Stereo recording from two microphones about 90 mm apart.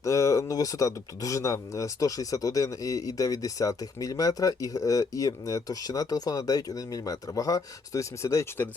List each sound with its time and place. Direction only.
0.0 s speech: 35° left (ahead or behind)